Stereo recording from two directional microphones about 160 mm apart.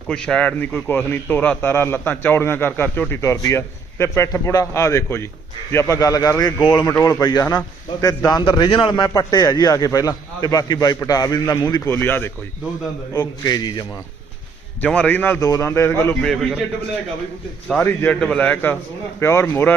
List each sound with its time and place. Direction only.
0.1 s a man's voice: 5° left (ahead or behind)
13.1 s a man's voice: 25° left (ahead or behind)
14.8 s a man's voice: 10° left (ahead or behind)
16.3 s a man's voice: centre (ahead or behind)
17.7 s a man's voice: 10° left (ahead or behind)